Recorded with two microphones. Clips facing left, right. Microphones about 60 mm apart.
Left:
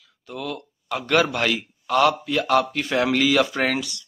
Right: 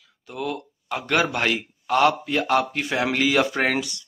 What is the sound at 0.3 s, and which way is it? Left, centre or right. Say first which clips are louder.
A man's voice: right 2 dB; right.